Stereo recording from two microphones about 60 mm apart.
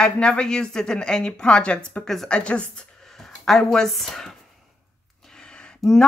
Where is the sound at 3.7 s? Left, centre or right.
Centre.